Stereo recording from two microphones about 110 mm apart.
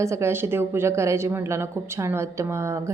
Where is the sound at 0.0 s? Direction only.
25° right (ahead or behind).